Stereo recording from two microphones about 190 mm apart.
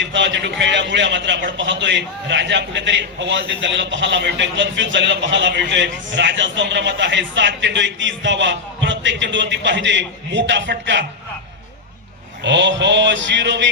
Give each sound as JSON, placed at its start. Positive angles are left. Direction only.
{"t": 0.0, "sound": "a man's voice", "side_deg": -70}
{"t": 12.4, "sound": "a man's voice", "side_deg": -70}